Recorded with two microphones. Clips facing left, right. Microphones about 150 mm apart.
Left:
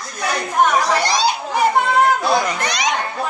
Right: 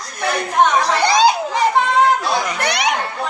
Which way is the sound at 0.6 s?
5° left (ahead or behind).